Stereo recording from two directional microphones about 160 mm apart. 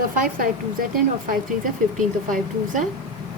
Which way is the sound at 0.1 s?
60° right (ahead or behind).